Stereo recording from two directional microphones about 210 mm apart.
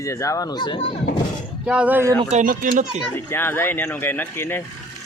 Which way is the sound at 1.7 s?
5° right (ahead or behind).